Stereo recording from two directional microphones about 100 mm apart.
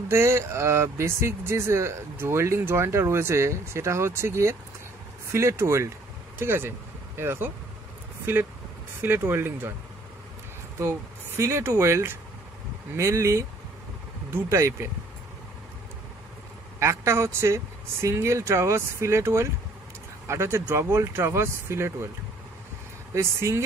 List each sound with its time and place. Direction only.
0.1 s speech: 25° right (ahead or behind)
10.8 s speech: 30° right (ahead or behind)
16.8 s speech: 25° right (ahead or behind)
23.1 s speech: 30° right (ahead or behind)